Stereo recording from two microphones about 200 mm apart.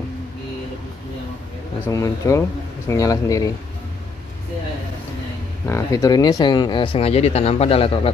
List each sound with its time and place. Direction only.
1.9 s speech: 15° left (ahead or behind)
5.7 s speech: 15° left (ahead or behind)